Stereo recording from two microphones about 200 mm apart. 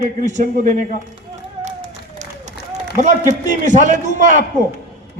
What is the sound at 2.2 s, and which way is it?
Crowd, 35° right (ahead or behind).